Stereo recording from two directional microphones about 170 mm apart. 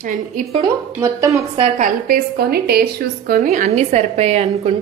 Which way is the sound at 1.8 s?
65° right (ahead or behind).